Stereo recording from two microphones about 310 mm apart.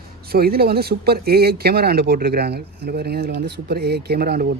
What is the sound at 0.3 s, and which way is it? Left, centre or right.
Speech, right.